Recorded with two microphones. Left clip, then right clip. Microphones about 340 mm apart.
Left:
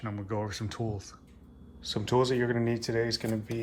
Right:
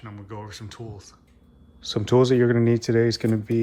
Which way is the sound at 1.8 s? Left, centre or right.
Centre.